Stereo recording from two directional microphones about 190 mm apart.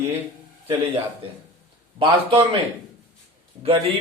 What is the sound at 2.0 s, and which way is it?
Speech, 30° right (ahead or behind).